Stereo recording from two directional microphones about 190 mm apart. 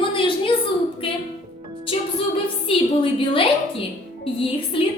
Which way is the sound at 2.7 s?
25° left (ahead or behind).